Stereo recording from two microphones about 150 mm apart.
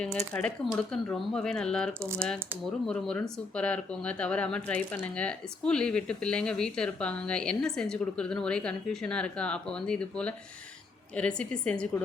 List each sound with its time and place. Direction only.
0.3 s speech: 5° left (ahead or behind)
2.0 s speech: 15° right (ahead or behind)
2.8 s speech: 5° left (ahead or behind)